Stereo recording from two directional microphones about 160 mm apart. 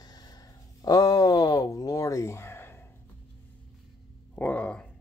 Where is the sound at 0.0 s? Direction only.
25° left (ahead or behind).